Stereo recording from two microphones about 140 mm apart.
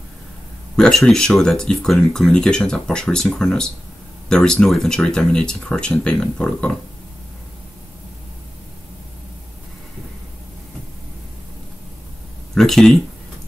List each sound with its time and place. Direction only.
0.7 s speech: 5° left (ahead or behind)
12.5 s speech: centre (ahead or behind)